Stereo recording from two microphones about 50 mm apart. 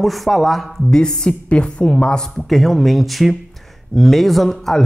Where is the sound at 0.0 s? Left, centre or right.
Centre.